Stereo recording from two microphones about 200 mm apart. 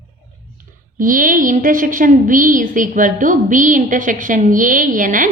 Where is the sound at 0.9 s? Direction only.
40° right (ahead or behind).